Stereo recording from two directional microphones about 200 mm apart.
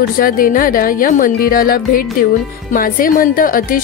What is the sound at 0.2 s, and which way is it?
A woman's voice, 45° left (ahead or behind).